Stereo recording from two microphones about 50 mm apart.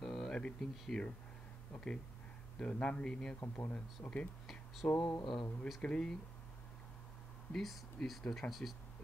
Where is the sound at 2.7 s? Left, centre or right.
Left.